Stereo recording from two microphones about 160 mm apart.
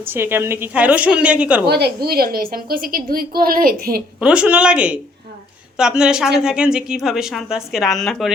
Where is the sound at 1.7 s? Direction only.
80° right; by 4.0 s 65° right (ahead or behind).